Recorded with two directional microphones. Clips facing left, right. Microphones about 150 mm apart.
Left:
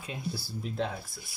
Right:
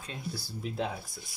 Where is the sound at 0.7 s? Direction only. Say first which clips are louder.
Left 1 dB; 5° right (ahead or behind).